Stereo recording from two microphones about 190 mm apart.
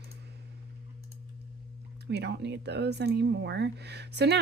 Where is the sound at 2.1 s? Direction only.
65° right (ahead or behind).